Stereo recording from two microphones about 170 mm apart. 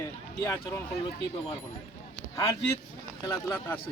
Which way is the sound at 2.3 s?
20° left (ahead or behind).